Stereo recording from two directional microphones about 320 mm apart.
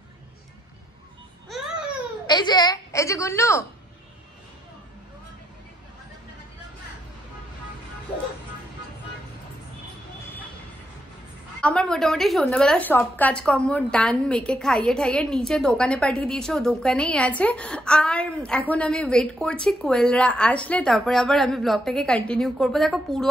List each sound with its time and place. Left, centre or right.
2.2 s a woman's voice: centre
11.6 s a woman's voice: centre